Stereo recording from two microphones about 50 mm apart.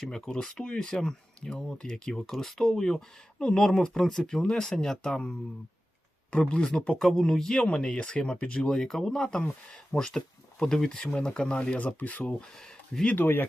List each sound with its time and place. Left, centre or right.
0.0 s speech: centre
8.7 s speech: centre
11.9 s speech: left
12.5 s speech: centre
13.1 s speech: left